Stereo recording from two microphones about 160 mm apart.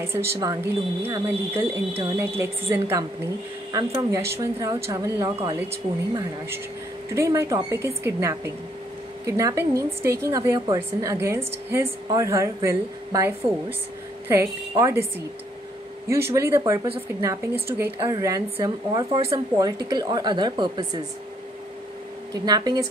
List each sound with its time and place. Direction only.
0.0 s speech: 15° right (ahead or behind)
7.2 s speech: 20° right (ahead or behind)
9.4 s speech: 20° right (ahead or behind)
16.3 s speech: 15° right (ahead or behind)
22.3 s speech: 25° right (ahead or behind)